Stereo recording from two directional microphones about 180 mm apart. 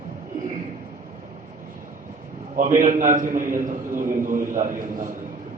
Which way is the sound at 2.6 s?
45° right (ahead or behind).